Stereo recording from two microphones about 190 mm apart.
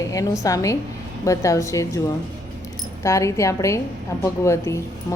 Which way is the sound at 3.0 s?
15° left (ahead or behind).